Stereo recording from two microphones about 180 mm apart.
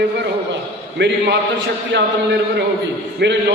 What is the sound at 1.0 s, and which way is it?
Speech, 80° right.